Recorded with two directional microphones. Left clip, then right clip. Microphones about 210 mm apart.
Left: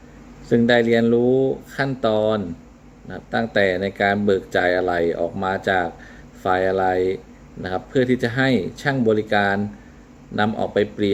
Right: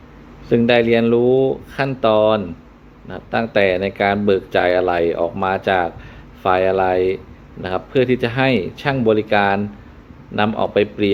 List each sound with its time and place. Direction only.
0.5 s speech: 10° left (ahead or behind)
1.2 s speech: 20° right (ahead or behind)
1.7 s speech: 10° left (ahead or behind)